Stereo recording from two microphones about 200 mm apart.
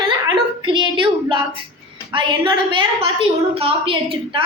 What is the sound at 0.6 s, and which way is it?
A woman's voice, 25° right (ahead or behind).